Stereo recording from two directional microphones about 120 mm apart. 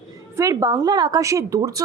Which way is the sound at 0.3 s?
25° right (ahead or behind).